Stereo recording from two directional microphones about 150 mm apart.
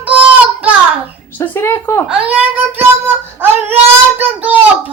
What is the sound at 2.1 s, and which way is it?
Child singing, 10° right (ahead or behind).